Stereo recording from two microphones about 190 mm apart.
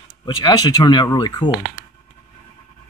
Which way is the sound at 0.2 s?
20° left (ahead or behind).